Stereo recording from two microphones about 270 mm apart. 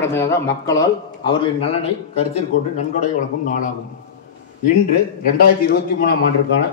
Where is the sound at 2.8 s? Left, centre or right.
Left.